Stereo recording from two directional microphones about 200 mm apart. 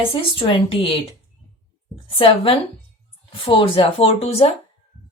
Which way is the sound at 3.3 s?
25° left (ahead or behind).